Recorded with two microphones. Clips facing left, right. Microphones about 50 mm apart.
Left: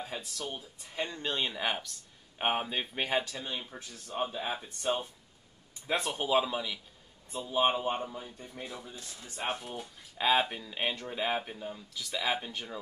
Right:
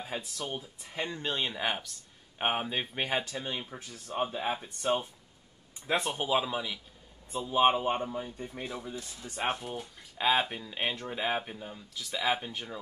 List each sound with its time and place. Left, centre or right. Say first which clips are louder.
0.1 s speech: right 2 dB; right; by 6.8 s centre
7.3 s speech: right 3 dB; right
9.2 s speech: right 3 dB; centre